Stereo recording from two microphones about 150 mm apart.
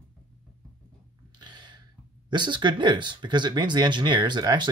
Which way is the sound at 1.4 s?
30° right (ahead or behind).